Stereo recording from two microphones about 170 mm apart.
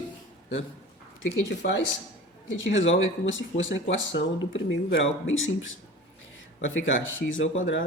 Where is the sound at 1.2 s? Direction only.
85° left.